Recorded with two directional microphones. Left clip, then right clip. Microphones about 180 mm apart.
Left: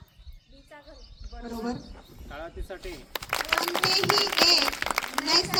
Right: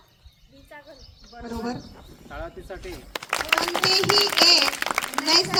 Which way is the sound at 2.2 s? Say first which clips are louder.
Right 3 dB; 20° left (ahead or behind).